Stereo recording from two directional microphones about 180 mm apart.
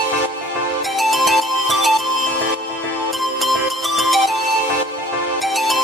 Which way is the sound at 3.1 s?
Centre (ahead or behind).